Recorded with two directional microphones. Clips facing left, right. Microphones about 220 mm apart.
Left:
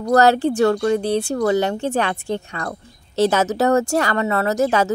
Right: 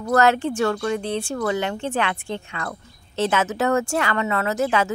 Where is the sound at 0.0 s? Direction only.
35° left (ahead or behind).